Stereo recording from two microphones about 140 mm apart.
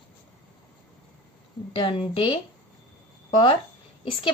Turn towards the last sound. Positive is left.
turn(degrees=35)  # may be behind; listen again after turning